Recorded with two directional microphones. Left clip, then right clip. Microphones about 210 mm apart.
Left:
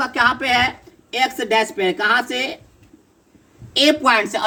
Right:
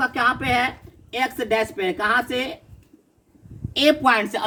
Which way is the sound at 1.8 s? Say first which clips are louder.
Left 4 dB; 10° right (ahead or behind).